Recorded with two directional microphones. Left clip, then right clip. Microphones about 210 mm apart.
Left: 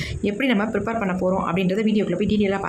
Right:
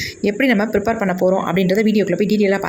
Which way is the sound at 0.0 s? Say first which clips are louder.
Right 6 dB; 15° right (ahead or behind).